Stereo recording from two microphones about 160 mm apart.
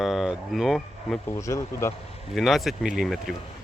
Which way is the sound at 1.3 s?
20° left (ahead or behind).